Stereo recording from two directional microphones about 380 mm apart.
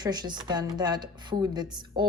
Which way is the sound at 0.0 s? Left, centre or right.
Centre.